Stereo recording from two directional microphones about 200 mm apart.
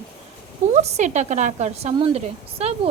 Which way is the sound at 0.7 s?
35° right (ahead or behind).